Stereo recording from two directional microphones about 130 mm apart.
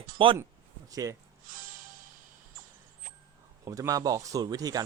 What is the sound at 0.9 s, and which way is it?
Speech, 25° right (ahead or behind).